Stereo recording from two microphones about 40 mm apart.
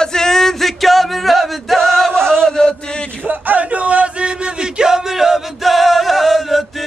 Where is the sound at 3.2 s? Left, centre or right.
Right.